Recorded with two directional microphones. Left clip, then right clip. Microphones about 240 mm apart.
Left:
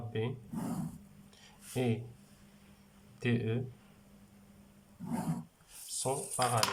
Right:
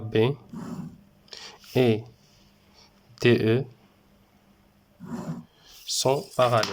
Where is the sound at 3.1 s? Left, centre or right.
Right.